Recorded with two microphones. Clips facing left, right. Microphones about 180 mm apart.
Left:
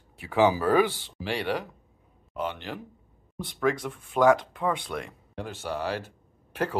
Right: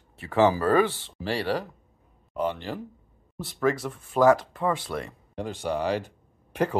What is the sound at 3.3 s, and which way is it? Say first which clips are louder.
Speech: right 1 dB; 5° right (ahead or behind).